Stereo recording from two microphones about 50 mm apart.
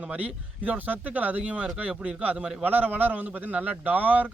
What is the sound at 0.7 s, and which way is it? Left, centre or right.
Speech, right.